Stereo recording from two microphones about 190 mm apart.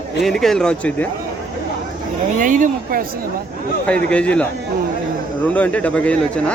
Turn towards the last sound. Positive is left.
turn(degrees=5)  # may be behind; listen again after turning